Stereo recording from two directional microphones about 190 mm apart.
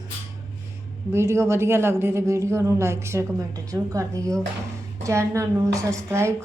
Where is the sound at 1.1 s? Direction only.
15° right (ahead or behind).